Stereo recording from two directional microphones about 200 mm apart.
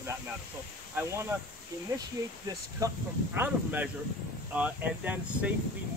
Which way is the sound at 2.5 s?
15° right (ahead or behind).